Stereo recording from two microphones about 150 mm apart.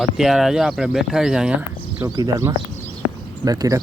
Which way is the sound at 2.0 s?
25° right (ahead or behind).